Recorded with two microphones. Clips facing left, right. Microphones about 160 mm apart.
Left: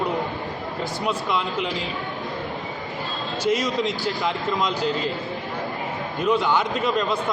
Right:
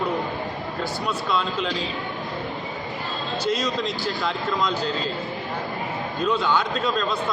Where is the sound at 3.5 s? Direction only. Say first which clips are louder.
Left 4 dB; 15° left (ahead or behind).